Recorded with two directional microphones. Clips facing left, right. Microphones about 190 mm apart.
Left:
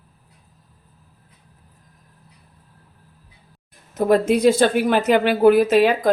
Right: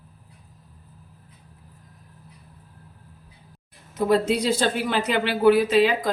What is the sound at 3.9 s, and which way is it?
Speech, 50° left (ahead or behind).